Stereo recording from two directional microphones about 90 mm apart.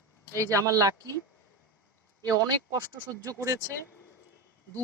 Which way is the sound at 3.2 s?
35° right (ahead or behind).